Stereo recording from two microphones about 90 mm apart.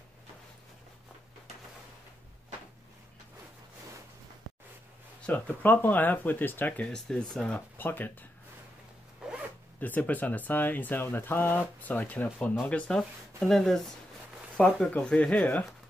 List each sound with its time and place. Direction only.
5.2 s speech: 20° left (ahead or behind)
6.9 s speech: 5° left (ahead or behind)
7.7 s speech: 20° left (ahead or behind)
9.2 s zipper: 10° right (ahead or behind)
9.8 s speech: 20° left (ahead or behind)
13.4 s speech: centre (ahead or behind)
14.9 s speech: 15° left (ahead or behind)